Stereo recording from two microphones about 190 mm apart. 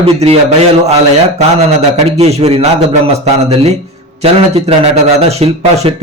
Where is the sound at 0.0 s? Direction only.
30° right (ahead or behind).